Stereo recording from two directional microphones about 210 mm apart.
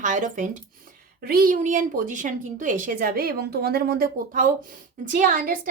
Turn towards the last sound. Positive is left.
turn(degrees=-40)  # may be behind; listen again after turning